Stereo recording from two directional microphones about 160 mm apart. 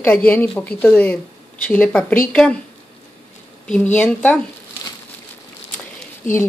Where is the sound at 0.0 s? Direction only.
10° left (ahead or behind).